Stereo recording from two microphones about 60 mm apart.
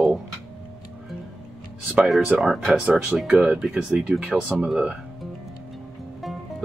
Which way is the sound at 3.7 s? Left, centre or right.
Centre.